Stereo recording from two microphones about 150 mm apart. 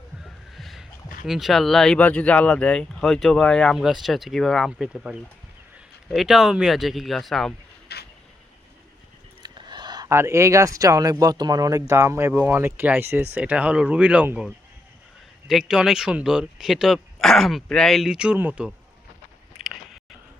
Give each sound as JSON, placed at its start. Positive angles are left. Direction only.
{"t": 0.5, "sound": "a sound", "side_deg": 0}
{"t": 1.3, "sound": "speech", "side_deg": 0}
{"t": 7.9, "sound": "vehicle", "side_deg": 90}
{"t": 9.4, "sound": "speech", "side_deg": -30}